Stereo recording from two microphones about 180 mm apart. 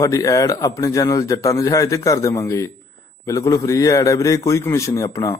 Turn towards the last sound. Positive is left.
turn(degrees=20)  # may be behind; listen again after turning